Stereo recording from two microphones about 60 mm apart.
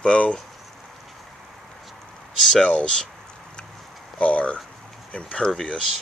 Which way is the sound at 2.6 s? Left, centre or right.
Centre.